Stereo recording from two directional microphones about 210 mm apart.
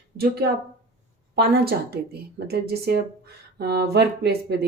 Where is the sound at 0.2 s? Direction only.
50° right (ahead or behind).